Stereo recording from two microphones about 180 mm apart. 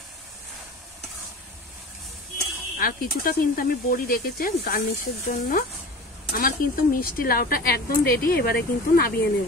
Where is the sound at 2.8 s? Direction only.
55° left (ahead or behind).